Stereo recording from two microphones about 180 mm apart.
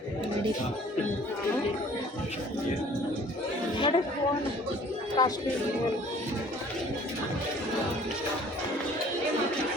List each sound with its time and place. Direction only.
3.8 s speech: 30° left (ahead or behind)
5.2 s speech: 20° left (ahead or behind)